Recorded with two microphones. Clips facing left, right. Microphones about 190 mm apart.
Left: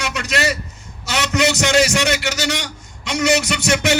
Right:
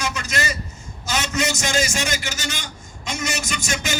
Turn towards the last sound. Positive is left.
turn(degrees=70)  # may be behind; listen again after turning